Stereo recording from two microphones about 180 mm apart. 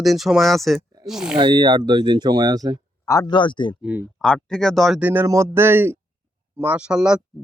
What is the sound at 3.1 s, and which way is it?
Speech, 20° left (ahead or behind).